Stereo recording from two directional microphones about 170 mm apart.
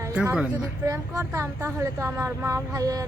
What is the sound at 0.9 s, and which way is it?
Speech, 20° right (ahead or behind).